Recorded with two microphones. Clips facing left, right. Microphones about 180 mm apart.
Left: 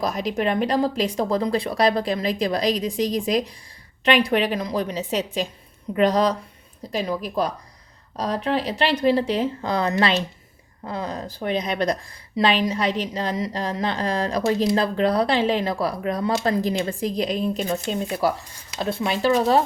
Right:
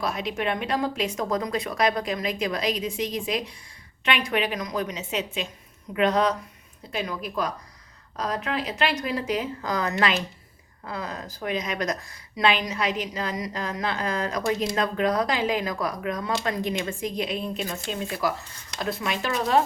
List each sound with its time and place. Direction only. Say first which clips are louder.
0.0 s speech: left 4 dB; 40° left (ahead or behind)
18.2 s speech: left 4 dB; 30° left (ahead or behind)